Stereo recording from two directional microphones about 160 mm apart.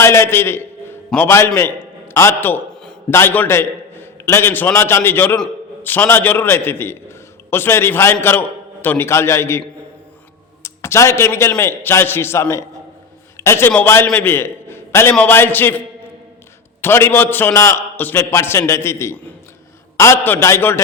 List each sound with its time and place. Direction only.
0.0 s a man's voice: 15° left (ahead or behind)
16.8 s a man's voice: 15° left (ahead or behind)